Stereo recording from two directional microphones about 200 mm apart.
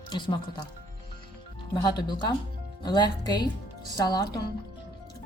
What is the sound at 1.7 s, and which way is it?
Speech, 20° left (ahead or behind).